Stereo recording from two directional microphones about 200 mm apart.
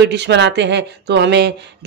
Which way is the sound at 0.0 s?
60° right (ahead or behind).